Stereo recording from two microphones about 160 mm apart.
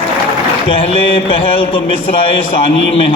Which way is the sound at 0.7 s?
35° left (ahead or behind).